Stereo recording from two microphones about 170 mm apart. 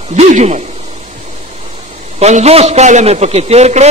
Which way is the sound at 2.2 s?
40° right (ahead or behind).